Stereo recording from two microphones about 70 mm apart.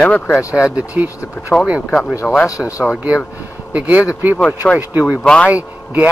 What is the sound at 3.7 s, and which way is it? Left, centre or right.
Speech, centre.